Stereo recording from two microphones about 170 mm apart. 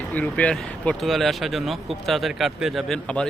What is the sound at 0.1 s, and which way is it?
Speech, 10° left (ahead or behind).